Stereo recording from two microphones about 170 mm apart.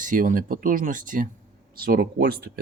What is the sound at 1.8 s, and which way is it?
Speech, 60° right (ahead or behind).